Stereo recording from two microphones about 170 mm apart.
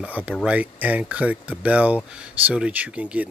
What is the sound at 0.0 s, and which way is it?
Speech, 5° right (ahead or behind).